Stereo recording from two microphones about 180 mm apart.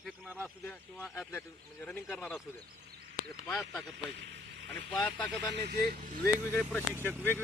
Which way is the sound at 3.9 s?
70° right (ahead or behind).